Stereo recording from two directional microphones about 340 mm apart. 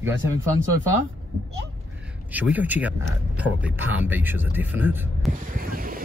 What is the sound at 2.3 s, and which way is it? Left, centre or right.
Speech, centre.